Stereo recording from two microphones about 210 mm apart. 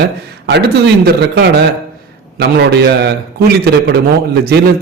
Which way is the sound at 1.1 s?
55° right (ahead or behind).